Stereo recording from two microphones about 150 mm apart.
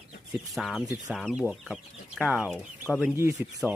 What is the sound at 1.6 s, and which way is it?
Chicken, centre (ahead or behind).